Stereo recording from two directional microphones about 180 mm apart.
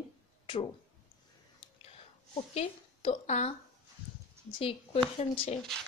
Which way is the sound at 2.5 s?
35° left (ahead or behind).